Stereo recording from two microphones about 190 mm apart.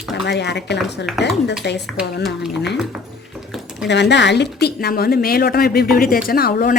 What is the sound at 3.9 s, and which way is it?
A woman's voice, 65° left (ahead or behind).